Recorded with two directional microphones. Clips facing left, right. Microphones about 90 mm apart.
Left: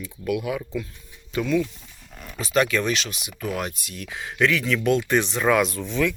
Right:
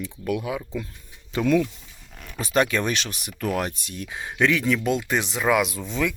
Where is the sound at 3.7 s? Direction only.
30° right (ahead or behind).